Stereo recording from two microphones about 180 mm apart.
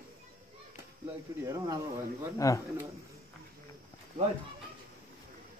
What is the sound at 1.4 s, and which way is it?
Speech, 20° right (ahead or behind).